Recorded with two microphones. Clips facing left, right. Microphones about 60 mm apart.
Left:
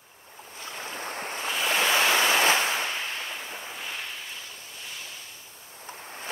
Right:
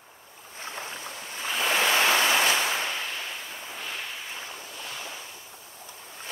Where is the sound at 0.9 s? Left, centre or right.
Left.